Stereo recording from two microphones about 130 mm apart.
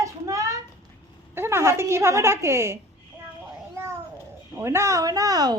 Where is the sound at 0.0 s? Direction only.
25° right (ahead or behind).